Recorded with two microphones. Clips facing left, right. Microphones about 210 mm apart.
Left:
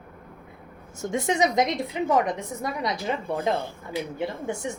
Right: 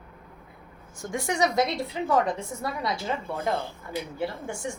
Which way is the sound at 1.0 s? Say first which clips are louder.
Left 3 dB; 20° left (ahead or behind).